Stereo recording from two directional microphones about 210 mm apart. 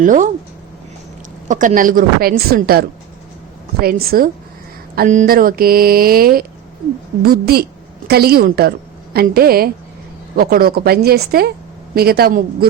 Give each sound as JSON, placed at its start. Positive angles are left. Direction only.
{"t": 0.0, "sound": "a woman's voice", "side_deg": -40}
{"t": 1.5, "sound": "a woman's voice", "side_deg": -40}